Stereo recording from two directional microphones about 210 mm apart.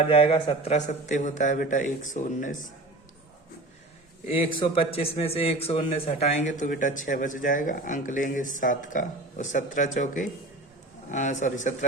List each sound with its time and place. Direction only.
0.1 s speech: 25° left (ahead or behind)
4.5 s speech: 25° left (ahead or behind)